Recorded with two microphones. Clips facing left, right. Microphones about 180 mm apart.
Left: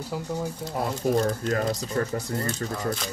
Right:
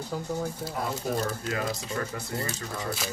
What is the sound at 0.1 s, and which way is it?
Speech, 10° left (ahead or behind).